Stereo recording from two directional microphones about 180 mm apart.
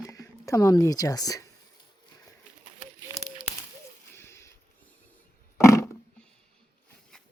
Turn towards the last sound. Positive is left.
turn(degrees=15)  # may be behind; listen again after turning